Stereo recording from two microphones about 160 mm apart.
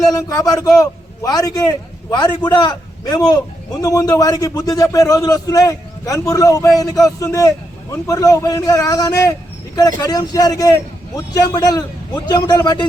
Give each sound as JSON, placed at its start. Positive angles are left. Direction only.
{"t": 0.1, "sound": "a man's voice", "side_deg": 20}